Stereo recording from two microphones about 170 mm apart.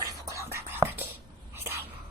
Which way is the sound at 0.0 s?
20° right (ahead or behind).